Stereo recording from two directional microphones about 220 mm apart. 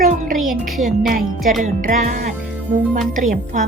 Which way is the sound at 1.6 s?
35° right (ahead or behind).